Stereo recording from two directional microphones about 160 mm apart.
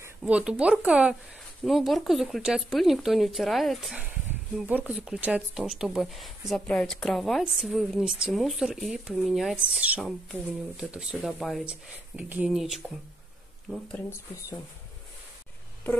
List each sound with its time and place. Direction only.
0.2 s speech: 5° right (ahead or behind)
13.9 s speech: 15° left (ahead or behind)